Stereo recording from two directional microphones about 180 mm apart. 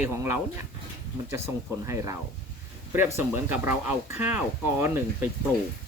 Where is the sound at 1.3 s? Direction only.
15° right (ahead or behind).